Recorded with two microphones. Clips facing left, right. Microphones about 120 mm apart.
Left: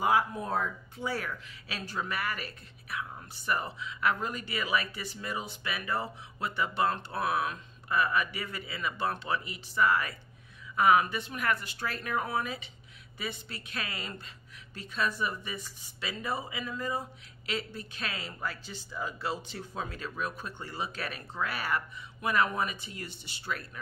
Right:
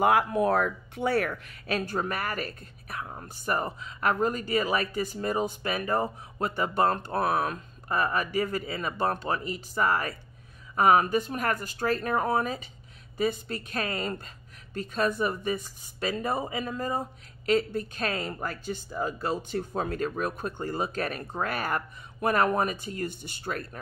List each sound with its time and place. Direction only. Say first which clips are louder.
0.0 s speech: right 5 dB; 65° right (ahead or behind); by 23.8 s 45° right (ahead or behind)